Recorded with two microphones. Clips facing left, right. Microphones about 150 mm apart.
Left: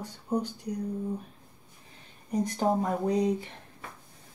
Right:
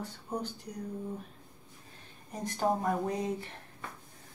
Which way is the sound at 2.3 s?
15° left (ahead or behind).